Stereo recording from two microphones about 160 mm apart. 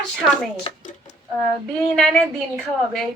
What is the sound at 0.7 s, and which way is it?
Speech, 35° left (ahead or behind).